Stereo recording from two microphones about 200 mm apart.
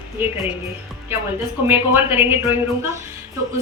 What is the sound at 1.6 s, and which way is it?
Speech, 10° right (ahead or behind).